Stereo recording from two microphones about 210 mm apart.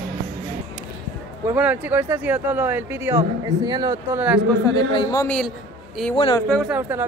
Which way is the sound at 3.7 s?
20° right (ahead or behind).